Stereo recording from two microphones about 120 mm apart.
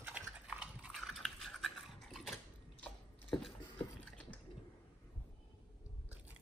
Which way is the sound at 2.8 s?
10° left (ahead or behind).